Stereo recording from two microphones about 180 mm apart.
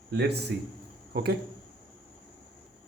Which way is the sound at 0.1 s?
65° right (ahead or behind).